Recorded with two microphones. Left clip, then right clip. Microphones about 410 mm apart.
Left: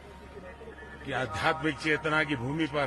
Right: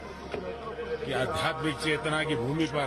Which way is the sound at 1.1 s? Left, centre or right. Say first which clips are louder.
Left 2 dB; left.